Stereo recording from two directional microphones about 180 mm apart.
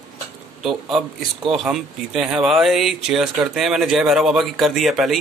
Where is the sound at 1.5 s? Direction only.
Centre (ahead or behind).